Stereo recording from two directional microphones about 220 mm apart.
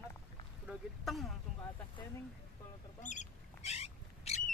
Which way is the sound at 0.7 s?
Centre (ahead or behind).